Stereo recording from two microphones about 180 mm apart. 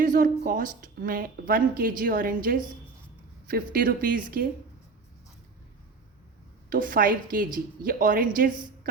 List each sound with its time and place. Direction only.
0.0 s speech: 50° right (ahead or behind)
6.7 s speech: 50° right (ahead or behind)